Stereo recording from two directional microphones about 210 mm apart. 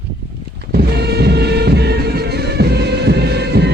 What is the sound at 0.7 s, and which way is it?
Music, 50° right (ahead or behind).